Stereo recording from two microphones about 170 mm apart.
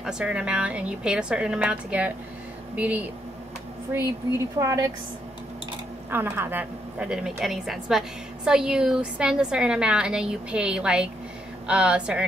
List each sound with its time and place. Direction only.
0.0 s speech: 5° right (ahead or behind)
6.0 s a woman's voice: 10° right (ahead or behind)